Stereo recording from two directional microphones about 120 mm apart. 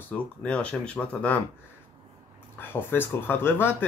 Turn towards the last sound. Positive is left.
turn(degrees=15)  # may be behind; listen again after turning